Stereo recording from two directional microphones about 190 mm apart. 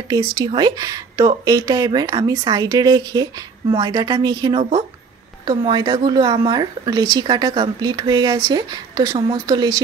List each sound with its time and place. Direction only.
0.1 s speech: 20° right (ahead or behind)